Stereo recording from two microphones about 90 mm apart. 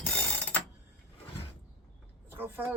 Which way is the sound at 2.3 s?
25° right (ahead or behind).